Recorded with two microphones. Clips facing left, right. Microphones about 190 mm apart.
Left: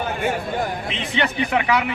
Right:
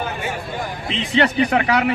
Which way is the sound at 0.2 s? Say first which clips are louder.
Left 4 dB; 55° left (ahead or behind).